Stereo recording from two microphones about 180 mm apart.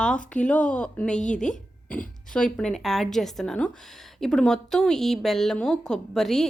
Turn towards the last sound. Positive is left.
turn(degrees=0)  # may be behind; listen again after turning